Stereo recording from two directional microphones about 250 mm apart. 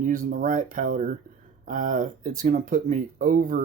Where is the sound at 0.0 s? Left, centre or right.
Right.